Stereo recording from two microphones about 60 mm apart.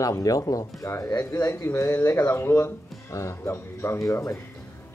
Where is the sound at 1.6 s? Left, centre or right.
Left.